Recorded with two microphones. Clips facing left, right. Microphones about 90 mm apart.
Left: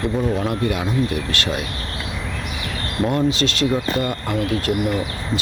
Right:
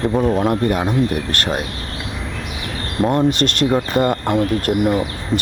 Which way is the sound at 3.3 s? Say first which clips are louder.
Right 3 dB; 50° right (ahead or behind).